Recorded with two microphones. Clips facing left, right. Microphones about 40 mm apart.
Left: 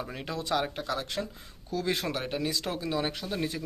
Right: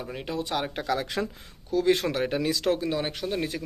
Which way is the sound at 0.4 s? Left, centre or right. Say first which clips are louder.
Left 1 dB; right.